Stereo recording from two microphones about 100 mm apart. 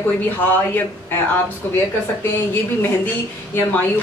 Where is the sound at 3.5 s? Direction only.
20° left (ahead or behind).